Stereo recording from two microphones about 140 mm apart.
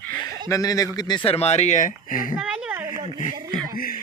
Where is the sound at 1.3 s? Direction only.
50° left (ahead or behind); by 2.3 s 75° left (ahead or behind).